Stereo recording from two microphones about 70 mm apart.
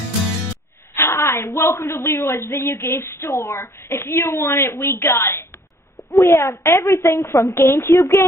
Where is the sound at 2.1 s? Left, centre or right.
Left.